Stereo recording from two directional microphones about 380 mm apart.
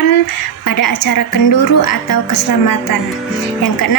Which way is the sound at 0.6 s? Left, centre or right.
Left.